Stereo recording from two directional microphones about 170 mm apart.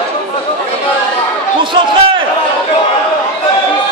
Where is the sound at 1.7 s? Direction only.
30° right (ahead or behind).